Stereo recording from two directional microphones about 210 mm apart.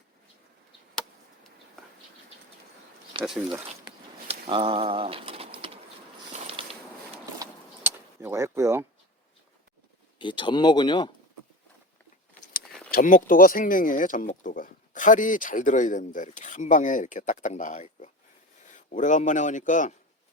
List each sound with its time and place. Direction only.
3.1 s speech: 25° right (ahead or behind)
3.8 s pigeon: 25° right (ahead or behind)
6.3 s a sound: 30° right (ahead or behind)
7.9 s vehicle: 10° right (ahead or behind)
10.2 s speech: 25° left (ahead or behind)
12.9 s speech: 40° left (ahead or behind)